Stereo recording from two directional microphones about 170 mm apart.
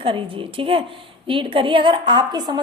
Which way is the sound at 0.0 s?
30° right (ahead or behind).